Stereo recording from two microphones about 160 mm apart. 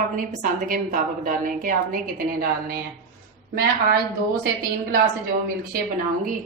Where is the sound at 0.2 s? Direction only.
60° right (ahead or behind); by 3.9 s 75° right (ahead or behind).